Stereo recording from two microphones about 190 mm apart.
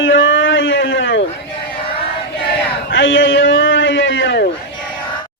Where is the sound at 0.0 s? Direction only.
80° left.